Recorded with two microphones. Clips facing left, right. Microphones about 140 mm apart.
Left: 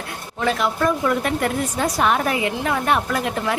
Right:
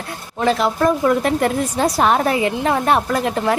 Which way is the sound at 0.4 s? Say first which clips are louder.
Right 4 dB; 35° right (ahead or behind).